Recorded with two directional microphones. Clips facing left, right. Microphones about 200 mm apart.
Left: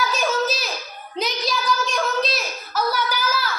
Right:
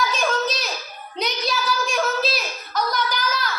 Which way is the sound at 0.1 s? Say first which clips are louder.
Left 1 dB; 5° left (ahead or behind).